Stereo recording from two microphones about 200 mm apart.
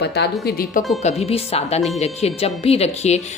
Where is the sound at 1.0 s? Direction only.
35° left (ahead or behind).